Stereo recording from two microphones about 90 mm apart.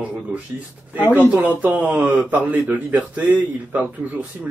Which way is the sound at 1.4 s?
20° right (ahead or behind).